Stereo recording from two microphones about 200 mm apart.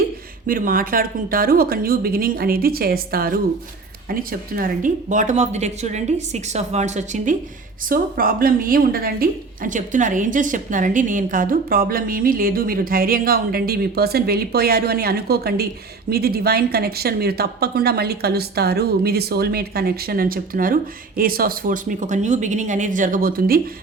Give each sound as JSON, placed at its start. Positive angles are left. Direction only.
{"t": 0.4, "sound": "a woman's voice", "side_deg": -45}